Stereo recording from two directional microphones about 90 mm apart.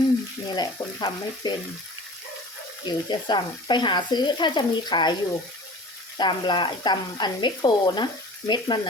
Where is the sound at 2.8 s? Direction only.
55° left (ahead or behind).